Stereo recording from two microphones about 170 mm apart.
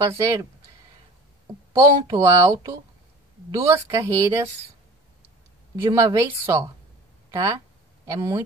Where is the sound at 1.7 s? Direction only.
20° right (ahead or behind).